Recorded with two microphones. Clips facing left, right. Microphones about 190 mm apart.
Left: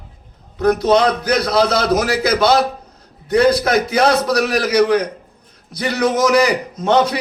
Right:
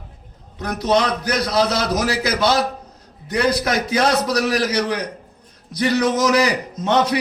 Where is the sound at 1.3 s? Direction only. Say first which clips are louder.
Left 2 dB; 60° left (ahead or behind).